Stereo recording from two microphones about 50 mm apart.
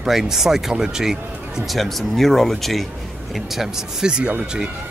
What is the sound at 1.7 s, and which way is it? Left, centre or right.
Speech, centre.